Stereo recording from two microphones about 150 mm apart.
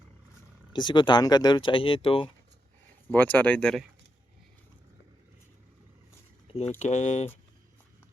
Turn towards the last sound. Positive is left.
turn(degrees=50)  # may be behind; listen again after turning